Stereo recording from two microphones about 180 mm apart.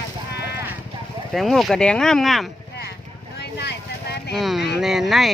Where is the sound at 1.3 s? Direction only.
Centre (ahead or behind).